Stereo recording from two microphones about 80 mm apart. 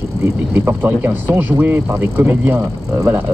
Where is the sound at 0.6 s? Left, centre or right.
Right.